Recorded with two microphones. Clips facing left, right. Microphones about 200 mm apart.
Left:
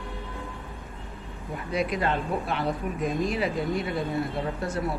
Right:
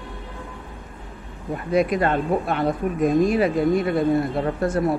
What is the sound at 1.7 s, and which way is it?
Speech, 50° right (ahead or behind).